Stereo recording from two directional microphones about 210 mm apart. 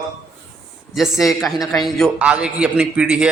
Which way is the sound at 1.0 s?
Centre (ahead or behind).